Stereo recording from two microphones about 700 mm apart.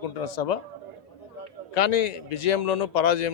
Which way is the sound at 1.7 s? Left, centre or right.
Left.